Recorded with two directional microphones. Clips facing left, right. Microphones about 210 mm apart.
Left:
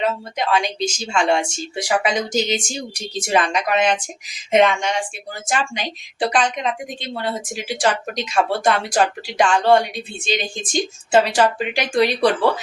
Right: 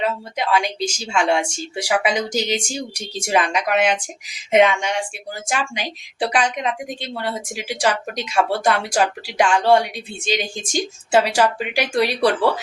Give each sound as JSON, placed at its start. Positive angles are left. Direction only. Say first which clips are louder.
{"t": 0.0, "sound": "speech", "louder": "left 1 dB", "side_deg": -10}